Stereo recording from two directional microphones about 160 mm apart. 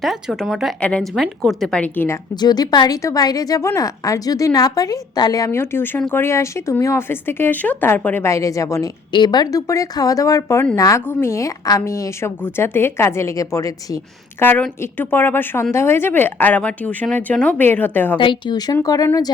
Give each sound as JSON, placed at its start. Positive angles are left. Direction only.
{"t": 0.0, "sound": "a woman's voice", "side_deg": 0}
{"t": 2.3, "sound": "a woman's voice", "side_deg": 25}
{"t": 18.2, "sound": "a woman's voice", "side_deg": 30}